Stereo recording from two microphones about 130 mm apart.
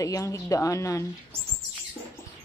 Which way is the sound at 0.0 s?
25° left (ahead or behind).